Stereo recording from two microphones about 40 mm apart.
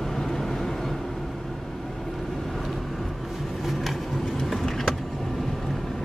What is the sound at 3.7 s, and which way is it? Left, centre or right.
Vehicle, centre.